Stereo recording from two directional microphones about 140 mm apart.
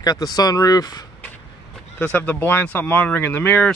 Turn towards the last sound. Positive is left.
turn(degrees=10)  # may be behind; listen again after turning